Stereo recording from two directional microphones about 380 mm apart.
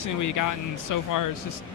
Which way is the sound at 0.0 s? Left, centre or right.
Left.